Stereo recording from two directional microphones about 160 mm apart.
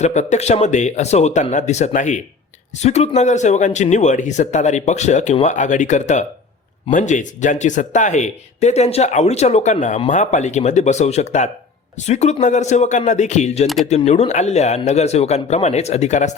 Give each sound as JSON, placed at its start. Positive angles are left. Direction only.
{"t": 0.0, "sound": "speech", "side_deg": 45}